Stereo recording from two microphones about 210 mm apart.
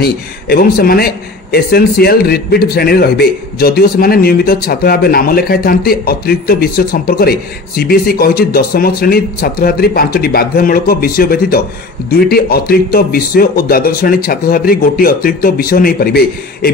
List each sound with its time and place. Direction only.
0.0 s a man's voice: 45° left (ahead or behind)